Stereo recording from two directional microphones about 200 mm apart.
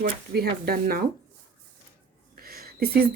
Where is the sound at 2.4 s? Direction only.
50° right (ahead or behind).